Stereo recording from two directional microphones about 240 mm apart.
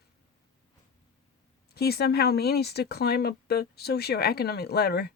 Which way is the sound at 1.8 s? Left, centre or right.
Left.